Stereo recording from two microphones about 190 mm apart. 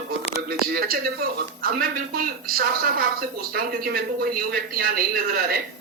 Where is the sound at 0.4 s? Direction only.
55° right (ahead or behind).